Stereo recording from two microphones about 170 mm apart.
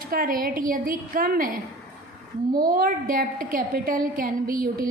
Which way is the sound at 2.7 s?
55° right (ahead or behind).